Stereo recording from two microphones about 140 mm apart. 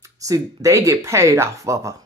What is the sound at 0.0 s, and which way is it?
Speech, 25° right (ahead or behind).